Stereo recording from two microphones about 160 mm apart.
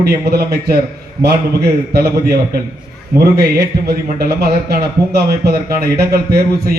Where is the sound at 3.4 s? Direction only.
80° right.